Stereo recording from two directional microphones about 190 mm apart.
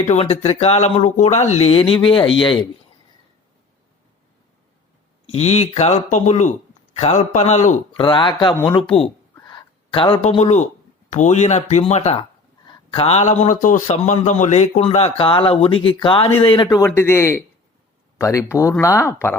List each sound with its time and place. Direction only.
0.0 s a man's voice: 35° left (ahead or behind)
5.2 s speech: 35° left (ahead or behind)
8.0 s a man's voice: 25° left (ahead or behind)